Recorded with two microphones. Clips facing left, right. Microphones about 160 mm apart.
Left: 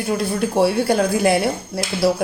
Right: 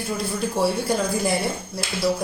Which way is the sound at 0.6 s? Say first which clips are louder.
Left 6 dB; 70° left (ahead or behind).